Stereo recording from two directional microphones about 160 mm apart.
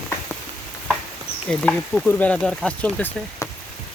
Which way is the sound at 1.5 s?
5° left (ahead or behind).